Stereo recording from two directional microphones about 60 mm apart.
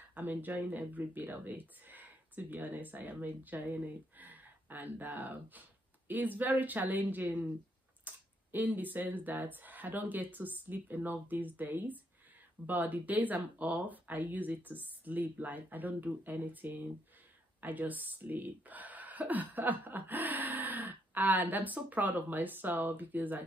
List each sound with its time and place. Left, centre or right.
0.1 s speech: right